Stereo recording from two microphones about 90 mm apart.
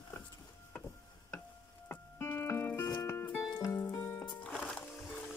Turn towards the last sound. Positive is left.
turn(degrees=10)  # may be behind; listen again after turning